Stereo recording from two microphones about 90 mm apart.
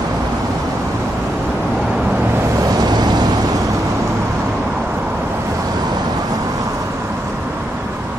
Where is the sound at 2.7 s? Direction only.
50° right (ahead or behind).